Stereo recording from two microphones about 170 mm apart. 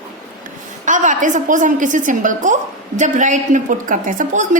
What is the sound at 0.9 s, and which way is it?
A woman's voice, 45° right (ahead or behind).